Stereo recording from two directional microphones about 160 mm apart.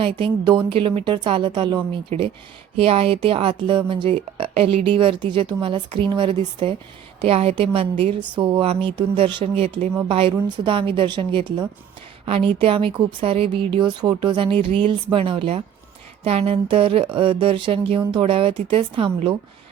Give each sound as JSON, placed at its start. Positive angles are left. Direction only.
{"t": 0.0, "sound": "speech", "side_deg": -30}